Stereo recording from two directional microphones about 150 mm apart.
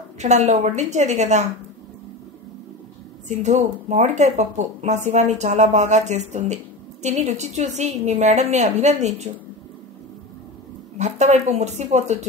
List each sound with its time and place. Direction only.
0.2 s speech: 50° right (ahead or behind)
3.3 s speech: 50° right (ahead or behind)
11.0 s speech: 50° right (ahead or behind)